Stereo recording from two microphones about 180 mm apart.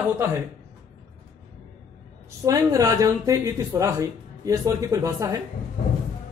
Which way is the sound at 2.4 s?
20° right (ahead or behind).